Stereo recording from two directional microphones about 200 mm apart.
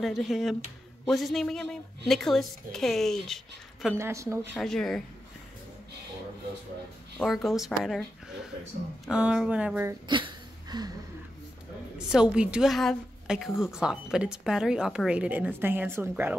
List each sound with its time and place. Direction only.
0.0 s a woman's voice: centre (ahead or behind)
3.9 s speech: 15° right (ahead or behind)
4.6 s a woman's voice: centre (ahead or behind)
7.2 s a woman's voice: centre (ahead or behind)
9.0 s a woman's voice: 5° right (ahead or behind)
10.0 s a sound: 25° right (ahead or behind)
12.1 s a woman's voice: 5° right (ahead or behind)